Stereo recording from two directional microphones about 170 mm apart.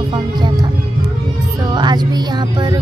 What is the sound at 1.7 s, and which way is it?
Speech, 25° right (ahead or behind).